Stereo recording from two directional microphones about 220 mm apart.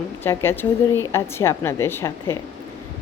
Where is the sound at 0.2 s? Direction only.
10° left (ahead or behind).